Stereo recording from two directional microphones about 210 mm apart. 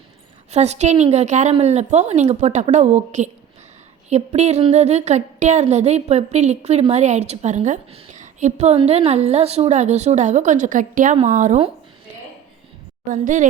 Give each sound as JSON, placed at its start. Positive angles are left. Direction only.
{"t": 0.5, "sound": "a woman's voice", "side_deg": -30}
{"t": 13.1, "sound": "a woman's voice", "side_deg": -40}